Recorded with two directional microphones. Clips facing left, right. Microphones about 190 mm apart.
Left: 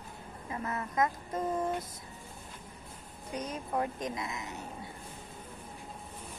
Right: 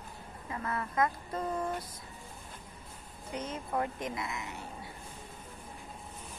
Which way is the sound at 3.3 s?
15° left (ahead or behind).